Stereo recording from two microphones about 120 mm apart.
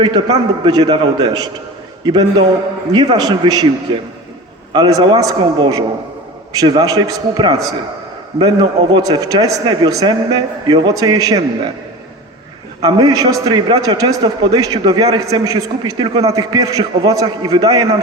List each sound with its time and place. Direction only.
0.0 s a man's voice: 35° right (ahead or behind)
2.9 s a man's voice: 35° right (ahead or behind)
4.7 s a man's voice: 35° right (ahead or behind)
12.8 s a man's voice: 35° right (ahead or behind)